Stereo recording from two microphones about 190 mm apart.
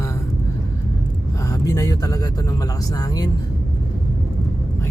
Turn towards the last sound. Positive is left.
turn(degrees=20)  # may be behind; listen again after turning